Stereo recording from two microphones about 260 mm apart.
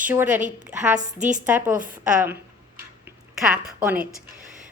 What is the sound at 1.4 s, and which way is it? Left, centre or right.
Speech, centre.